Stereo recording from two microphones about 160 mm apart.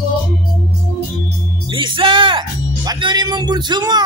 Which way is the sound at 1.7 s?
30° right (ahead or behind).